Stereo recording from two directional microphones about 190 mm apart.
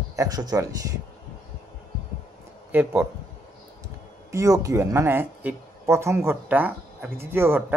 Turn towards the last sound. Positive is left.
turn(degrees=-10)  # may be behind; listen again after turning